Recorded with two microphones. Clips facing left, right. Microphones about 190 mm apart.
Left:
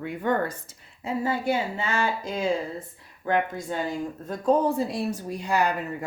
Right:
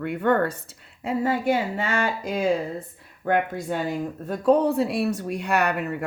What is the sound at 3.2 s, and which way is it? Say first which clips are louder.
Speech: right 2 dB; 55° right (ahead or behind).